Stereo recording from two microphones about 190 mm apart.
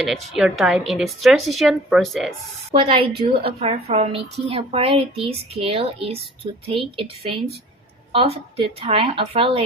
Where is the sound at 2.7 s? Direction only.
30° right (ahead or behind).